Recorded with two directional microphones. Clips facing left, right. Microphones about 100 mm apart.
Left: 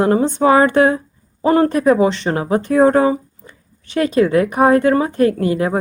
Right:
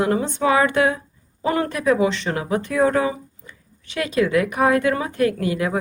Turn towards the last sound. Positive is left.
turn(degrees=35)  # may be behind; listen again after turning